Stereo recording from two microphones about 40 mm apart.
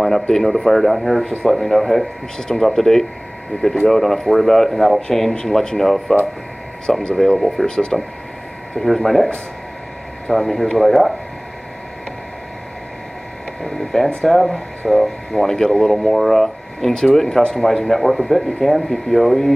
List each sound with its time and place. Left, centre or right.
0.3 s speech: centre
5.3 s speech: centre
7.2 s speech: centre
7.6 s speech: centre
8.8 s speech: centre
10.4 s speech: centre
13.7 s speech: centre
15.3 s speech: centre